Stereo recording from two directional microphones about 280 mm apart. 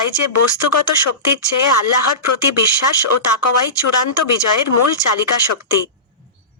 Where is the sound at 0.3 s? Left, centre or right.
Left.